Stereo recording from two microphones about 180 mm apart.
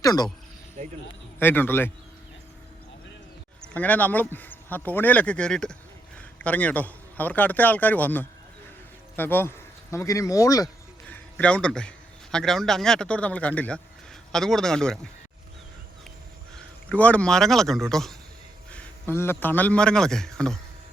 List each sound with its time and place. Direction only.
0.0 s speech: 20° left (ahead or behind)
1.4 s speech: 10° left (ahead or behind)
3.6 s a man's voice: 10° left (ahead or behind)
11.1 s a man's voice: 5° left (ahead or behind)
16.9 s a man's voice: 5° left (ahead or behind)